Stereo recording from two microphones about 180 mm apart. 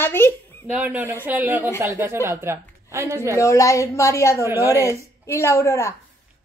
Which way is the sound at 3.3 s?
15° left (ahead or behind).